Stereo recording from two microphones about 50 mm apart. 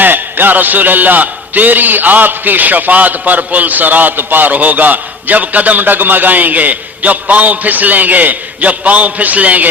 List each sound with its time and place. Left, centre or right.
0.0 s a man's voice: right